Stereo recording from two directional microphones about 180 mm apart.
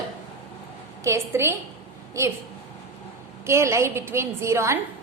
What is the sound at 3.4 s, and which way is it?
A woman's voice, 15° right (ahead or behind).